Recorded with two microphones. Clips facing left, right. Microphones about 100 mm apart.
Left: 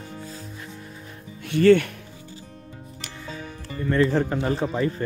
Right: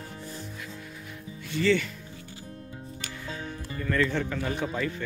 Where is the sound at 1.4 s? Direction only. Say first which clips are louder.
Left 9 dB; 55° left (ahead or behind).